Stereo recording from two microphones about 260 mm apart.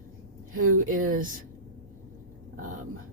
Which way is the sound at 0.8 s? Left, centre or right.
Right.